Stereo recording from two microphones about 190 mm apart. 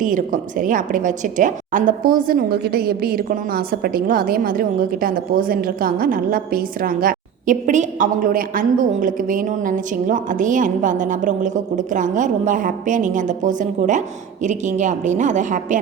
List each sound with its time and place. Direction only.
0.0 s a woman's voice: 45° right (ahead or behind)